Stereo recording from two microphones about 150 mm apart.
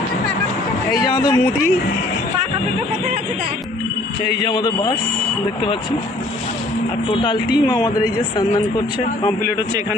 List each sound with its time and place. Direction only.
0.9 s speech: 25° left (ahead or behind)
4.4 s speech: 30° left (ahead or behind)
7.1 s speech: 30° left (ahead or behind)